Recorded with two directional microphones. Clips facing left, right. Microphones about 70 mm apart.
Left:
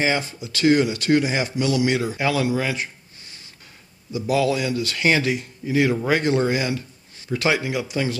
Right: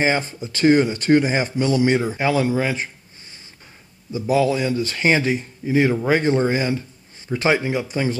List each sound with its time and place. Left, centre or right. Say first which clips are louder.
0.0 s speech: right 2 dB; right
4.1 s speech: right 2 dB; right